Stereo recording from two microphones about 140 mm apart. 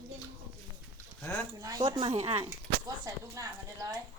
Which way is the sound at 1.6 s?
25° right (ahead or behind).